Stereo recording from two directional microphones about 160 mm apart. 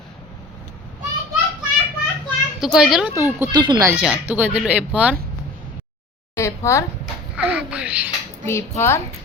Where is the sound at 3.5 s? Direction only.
30° right (ahead or behind).